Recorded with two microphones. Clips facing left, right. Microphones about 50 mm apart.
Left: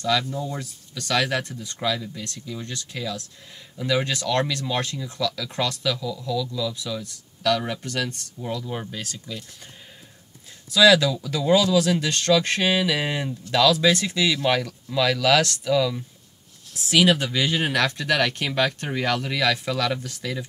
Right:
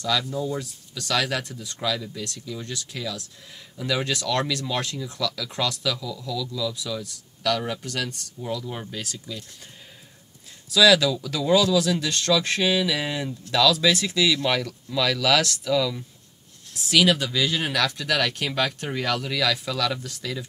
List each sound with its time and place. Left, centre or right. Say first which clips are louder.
0.0 s speech: left 1 dB; left; by 9.1 s centre
10.7 s speech: left 1 dB; centre
11.8 s speech: left 2 dB; left